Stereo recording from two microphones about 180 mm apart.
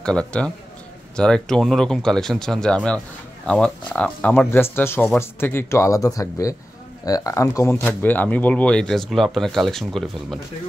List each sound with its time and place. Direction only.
0.0 s speech: 5° left (ahead or behind)